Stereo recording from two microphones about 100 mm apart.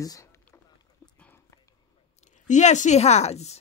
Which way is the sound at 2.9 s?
90° left.